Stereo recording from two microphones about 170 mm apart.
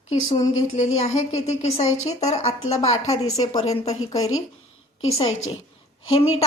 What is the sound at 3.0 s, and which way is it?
Speech, 20° left (ahead or behind).